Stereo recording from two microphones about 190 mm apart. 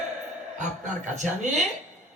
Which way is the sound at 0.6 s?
40° right (ahead or behind).